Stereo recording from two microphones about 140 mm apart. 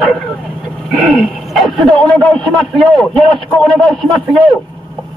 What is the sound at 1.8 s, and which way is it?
Speech, 30° right (ahead or behind).